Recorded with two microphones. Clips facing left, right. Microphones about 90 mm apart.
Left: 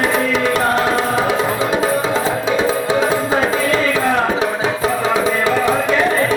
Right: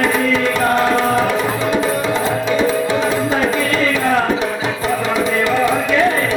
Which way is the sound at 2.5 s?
25° left (ahead or behind).